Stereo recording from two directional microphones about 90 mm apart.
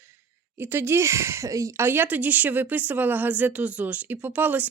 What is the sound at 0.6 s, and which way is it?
Speech, 25° right (ahead or behind).